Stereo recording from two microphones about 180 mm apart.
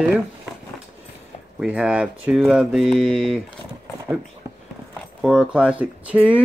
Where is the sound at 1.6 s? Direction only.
5° right (ahead or behind).